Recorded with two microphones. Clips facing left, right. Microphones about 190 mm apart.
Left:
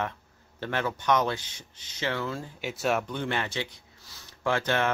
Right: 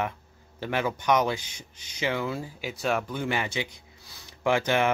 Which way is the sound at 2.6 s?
Centre (ahead or behind).